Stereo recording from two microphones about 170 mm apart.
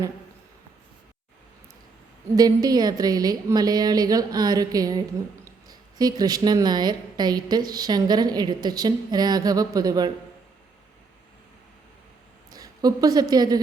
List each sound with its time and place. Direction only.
2.3 s a woman's voice: 20° right (ahead or behind)
12.5 s a sound: 20° right (ahead or behind)
13.3 s a woman's voice: 25° right (ahead or behind)